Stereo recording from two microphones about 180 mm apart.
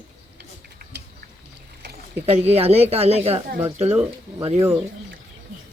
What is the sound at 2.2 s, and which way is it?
Speech, 35° right (ahead or behind).